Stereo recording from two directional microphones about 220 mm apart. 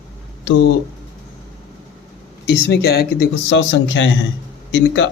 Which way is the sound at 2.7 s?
45° left (ahead or behind).